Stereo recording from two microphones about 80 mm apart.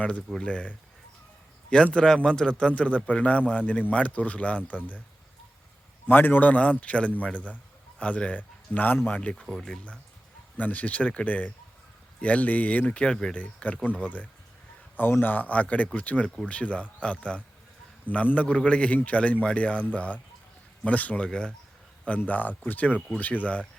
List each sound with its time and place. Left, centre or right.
0.2 s speech: centre
0.4 s a man's voice: centre
6.1 s a man's voice: left
9.3 s a man's voice: centre
22.3 s a man's voice: left